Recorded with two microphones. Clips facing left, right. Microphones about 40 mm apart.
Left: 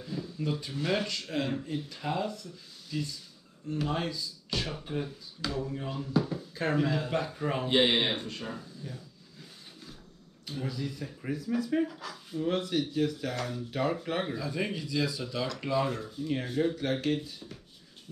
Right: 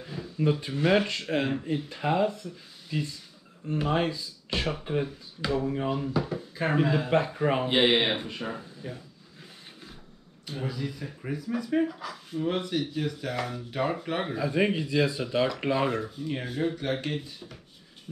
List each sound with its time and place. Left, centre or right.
0.0 s speech: right
10.7 s speech: centre
14.3 s speech: right
16.2 s speech: centre